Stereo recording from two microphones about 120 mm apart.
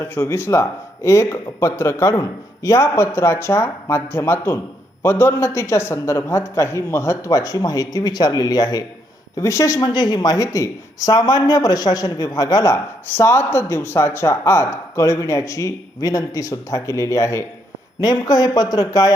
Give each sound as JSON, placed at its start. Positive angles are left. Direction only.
{"t": 0.0, "sound": "a man's voice", "side_deg": 20}